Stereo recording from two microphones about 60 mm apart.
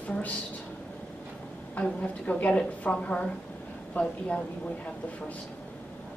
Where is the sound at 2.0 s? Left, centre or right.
Left.